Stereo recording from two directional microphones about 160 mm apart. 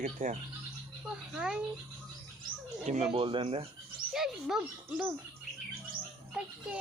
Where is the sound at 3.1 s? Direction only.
30° right (ahead or behind).